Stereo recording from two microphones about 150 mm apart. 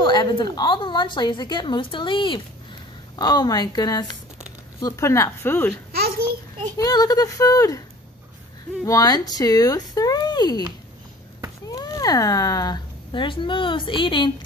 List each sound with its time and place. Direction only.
0.0 s a woman's voice: 30° left (ahead or behind)
5.9 s babbling: 90° right
6.8 s speech: 25° left (ahead or behind)
8.8 s speech: 25° left (ahead or behind)
11.6 s speech: 25° left (ahead or behind)